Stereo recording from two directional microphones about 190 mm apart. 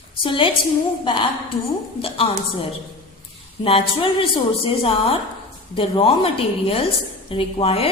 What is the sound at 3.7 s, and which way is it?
A woman's voice, 30° left (ahead or behind).